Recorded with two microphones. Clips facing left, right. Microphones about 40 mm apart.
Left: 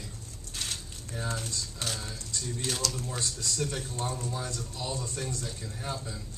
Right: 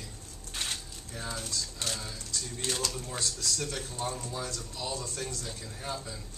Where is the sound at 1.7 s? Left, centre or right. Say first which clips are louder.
Even; centre.